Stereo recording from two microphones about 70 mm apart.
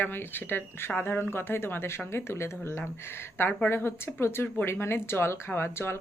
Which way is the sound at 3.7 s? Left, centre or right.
Left.